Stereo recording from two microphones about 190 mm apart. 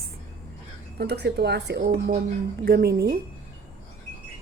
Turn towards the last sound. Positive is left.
turn(degrees=-60)  # may be behind; listen again after turning